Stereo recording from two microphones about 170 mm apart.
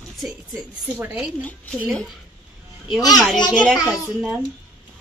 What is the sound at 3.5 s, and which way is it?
Speech, 5° left (ahead or behind).